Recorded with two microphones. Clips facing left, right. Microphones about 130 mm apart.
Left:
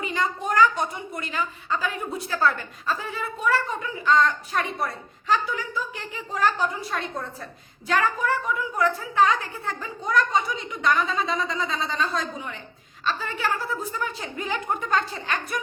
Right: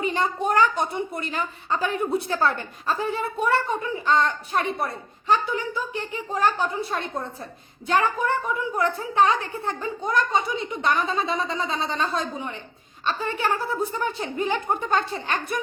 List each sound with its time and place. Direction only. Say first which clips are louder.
0.0 s a child's voice: right 3 dB; 35° right (ahead or behind)